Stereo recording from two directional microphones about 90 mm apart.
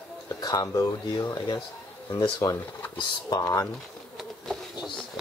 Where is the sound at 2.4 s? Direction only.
30° left (ahead or behind).